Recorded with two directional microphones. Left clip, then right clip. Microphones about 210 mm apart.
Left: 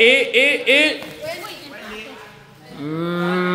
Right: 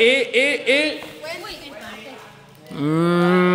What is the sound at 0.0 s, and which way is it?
Speech, 10° right (ahead or behind).